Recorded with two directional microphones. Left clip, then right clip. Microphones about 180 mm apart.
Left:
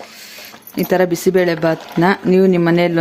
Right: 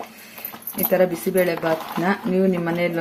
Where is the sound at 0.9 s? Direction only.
60° left (ahead or behind).